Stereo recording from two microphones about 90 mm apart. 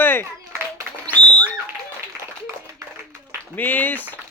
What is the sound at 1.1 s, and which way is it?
Bird, 20° left (ahead or behind).